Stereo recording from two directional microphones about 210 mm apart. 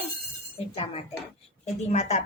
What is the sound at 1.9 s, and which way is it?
Speech, 30° left (ahead or behind).